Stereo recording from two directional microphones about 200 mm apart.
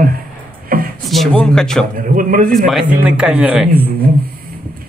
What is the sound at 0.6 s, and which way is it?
Beatboxing, 45° right (ahead or behind).